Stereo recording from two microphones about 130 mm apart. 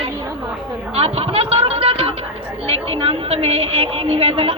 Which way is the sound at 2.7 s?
50° right (ahead or behind).